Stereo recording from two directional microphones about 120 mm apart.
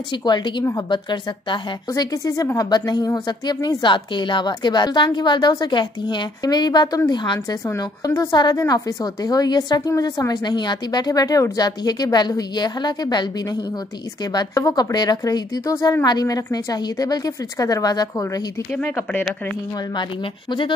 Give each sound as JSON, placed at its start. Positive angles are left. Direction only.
{"t": 0.2, "sound": "a woman's voice", "side_deg": 35}
{"t": 7.6, "sound": "a woman's voice", "side_deg": 25}
{"t": 14.3, "sound": "a woman's voice", "side_deg": 30}
{"t": 18.8, "sound": "speech", "side_deg": 15}